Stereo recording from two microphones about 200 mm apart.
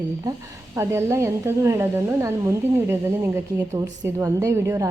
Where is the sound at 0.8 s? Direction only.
15° right (ahead or behind).